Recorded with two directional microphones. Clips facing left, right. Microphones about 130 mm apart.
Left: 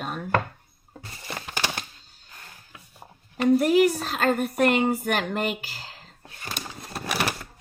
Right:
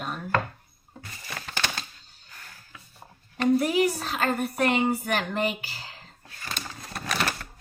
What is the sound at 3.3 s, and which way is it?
A woman's voice, centre (ahead or behind).